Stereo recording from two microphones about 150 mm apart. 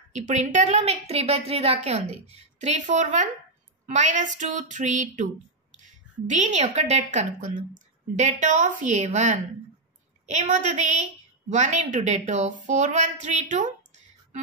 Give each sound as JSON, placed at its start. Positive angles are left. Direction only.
{"t": 0.1, "sound": "a woman's voice", "side_deg": -50}
{"t": 3.8, "sound": "a sound", "side_deg": -55}
{"t": 5.8, "sound": "a woman's voice", "side_deg": -55}